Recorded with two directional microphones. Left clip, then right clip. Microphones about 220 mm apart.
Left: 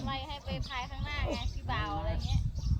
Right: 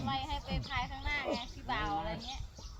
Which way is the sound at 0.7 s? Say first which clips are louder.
Right 3 dB; 30° left (ahead or behind).